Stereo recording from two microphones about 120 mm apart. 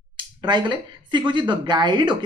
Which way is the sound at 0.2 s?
40° right (ahead or behind).